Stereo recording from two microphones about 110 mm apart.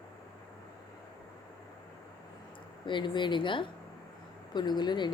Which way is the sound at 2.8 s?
45° left (ahead or behind).